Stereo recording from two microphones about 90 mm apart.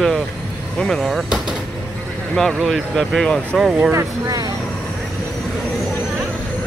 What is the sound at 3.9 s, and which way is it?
Speech, 35° right (ahead or behind).